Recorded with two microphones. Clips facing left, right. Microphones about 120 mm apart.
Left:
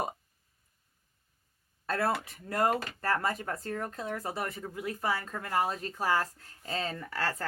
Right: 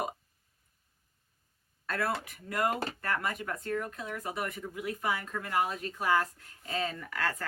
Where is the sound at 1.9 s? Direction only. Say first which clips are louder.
Left 3 dB; 30° left (ahead or behind).